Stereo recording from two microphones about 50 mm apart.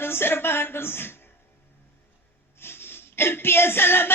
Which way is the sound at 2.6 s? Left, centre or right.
Left.